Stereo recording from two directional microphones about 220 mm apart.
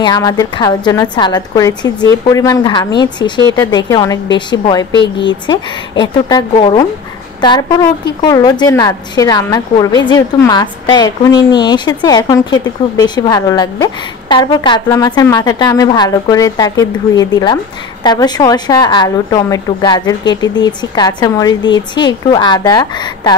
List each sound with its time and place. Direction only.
0.0 s a woman's voice: 15° left (ahead or behind)